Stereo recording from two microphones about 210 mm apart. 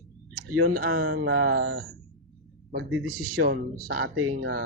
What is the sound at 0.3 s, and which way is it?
Speech, 45° right (ahead or behind).